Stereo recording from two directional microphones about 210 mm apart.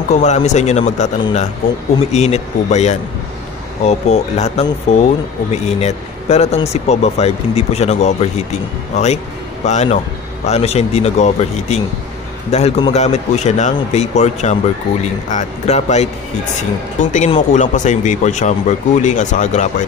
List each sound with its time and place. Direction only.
0.2 s a man's voice: 35° left (ahead or behind)